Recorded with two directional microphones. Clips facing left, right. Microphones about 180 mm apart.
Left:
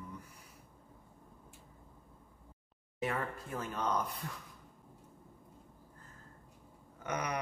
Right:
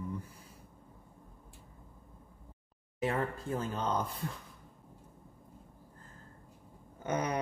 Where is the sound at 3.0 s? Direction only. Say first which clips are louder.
Right 4 dB; 30° right (ahead or behind).